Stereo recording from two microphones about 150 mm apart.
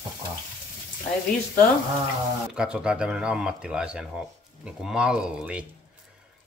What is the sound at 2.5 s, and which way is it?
Speech, 5° right (ahead or behind).